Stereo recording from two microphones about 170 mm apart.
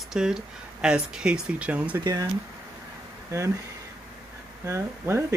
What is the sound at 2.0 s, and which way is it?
Speech, 20° right (ahead or behind).